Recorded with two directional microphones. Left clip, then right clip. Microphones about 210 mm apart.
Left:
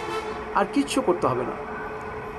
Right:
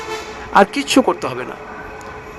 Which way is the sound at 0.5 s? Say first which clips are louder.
Right 11 dB; 50° right (ahead or behind).